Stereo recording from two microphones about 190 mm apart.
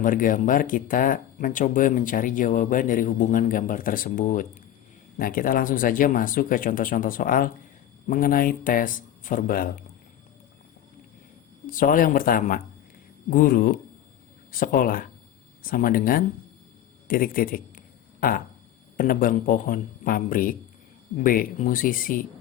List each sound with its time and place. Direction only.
0.0 s speech: 45° left (ahead or behind)
11.6 s speech: 45° left (ahead or behind)
18.2 s a sound: 45° left (ahead or behind)
18.9 s speech: 45° left (ahead or behind)